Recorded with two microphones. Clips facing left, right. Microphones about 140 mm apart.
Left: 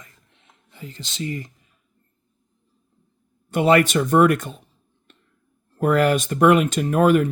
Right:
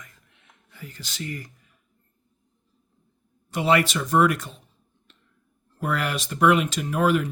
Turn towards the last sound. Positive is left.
turn(degrees=50)  # may be behind; listen again after turning